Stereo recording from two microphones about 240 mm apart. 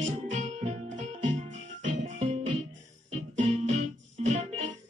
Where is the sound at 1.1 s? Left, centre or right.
Right.